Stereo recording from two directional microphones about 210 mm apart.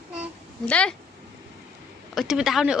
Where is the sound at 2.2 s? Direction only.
Centre (ahead or behind).